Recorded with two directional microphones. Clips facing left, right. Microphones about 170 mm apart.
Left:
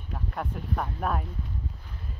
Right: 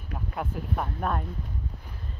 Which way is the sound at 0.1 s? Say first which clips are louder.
Right 1 dB; 5° right (ahead or behind).